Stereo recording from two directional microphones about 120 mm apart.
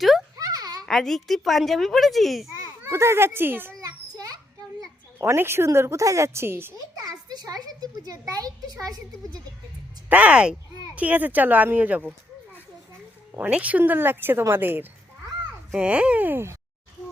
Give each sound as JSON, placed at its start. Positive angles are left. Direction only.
{"t": 0.3, "sound": "a sound", "side_deg": -30}
{"t": 0.9, "sound": "a child's voice", "side_deg": 0}
{"t": 2.6, "sound": "a child's voice", "side_deg": -25}
{"t": 3.8, "sound": "children playing", "side_deg": -30}
{"t": 5.2, "sound": "a woman's voice", "side_deg": -20}
{"t": 7.0, "sound": "a child's voice", "side_deg": -35}
{"t": 10.1, "sound": "speech", "side_deg": -10}
{"t": 13.3, "sound": "speech", "side_deg": -15}